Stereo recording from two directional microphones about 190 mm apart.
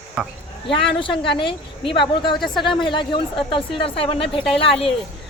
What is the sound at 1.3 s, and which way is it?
A man's voice, 25° left (ahead or behind).